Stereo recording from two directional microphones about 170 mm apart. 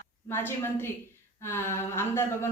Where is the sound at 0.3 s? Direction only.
15° left (ahead or behind).